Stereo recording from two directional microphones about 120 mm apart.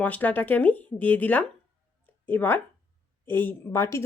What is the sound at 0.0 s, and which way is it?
A woman's voice, 15° left (ahead or behind).